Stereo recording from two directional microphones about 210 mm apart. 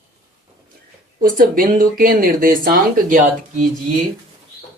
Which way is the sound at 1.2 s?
40° right (ahead or behind).